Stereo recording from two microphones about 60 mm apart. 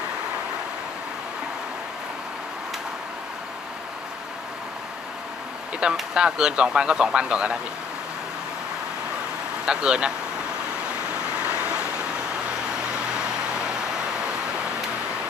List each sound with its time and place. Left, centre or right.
5.8 s speech: centre
9.6 s speech: centre
11.4 s vehicle: right